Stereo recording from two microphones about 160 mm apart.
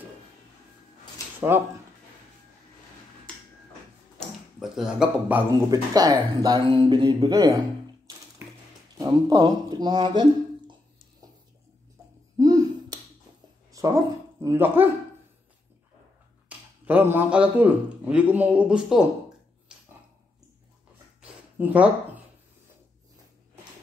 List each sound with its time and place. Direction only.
1.5 s speech: 15° right (ahead or behind)
3.3 s finger snapping: 5° left (ahead or behind)
4.6 s speech: 5° right (ahead or behind)
5.7 s speech: 25° right (ahead or behind)
8.9 s speech: 25° right (ahead or behind)
12.4 s a sound: 20° right (ahead or behind)
14.4 s speech: 15° right (ahead or behind)
16.4 s speech: 10° right (ahead or behind)
19.7 s a sound: 5° right (ahead or behind)
21.2 s a sound: 10° right (ahead or behind)